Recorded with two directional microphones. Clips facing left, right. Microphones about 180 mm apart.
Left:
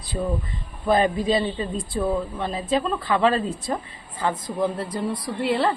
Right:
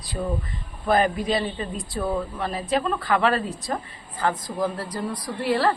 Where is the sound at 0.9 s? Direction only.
25° left (ahead or behind).